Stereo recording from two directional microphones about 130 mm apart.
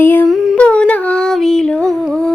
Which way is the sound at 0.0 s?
15° left (ahead or behind).